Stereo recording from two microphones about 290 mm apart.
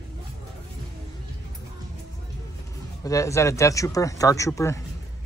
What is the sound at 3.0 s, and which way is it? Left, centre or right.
Speech, centre.